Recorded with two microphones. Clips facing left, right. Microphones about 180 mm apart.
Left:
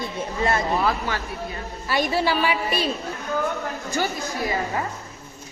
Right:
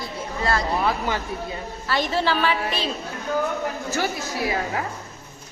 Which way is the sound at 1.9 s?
10° left (ahead or behind).